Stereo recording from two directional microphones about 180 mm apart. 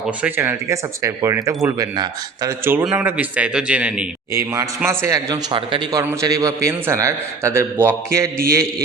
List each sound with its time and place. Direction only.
0.2 s a man's voice: 10° right (ahead or behind)